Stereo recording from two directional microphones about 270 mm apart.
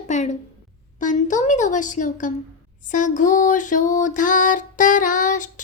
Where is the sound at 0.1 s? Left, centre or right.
Left.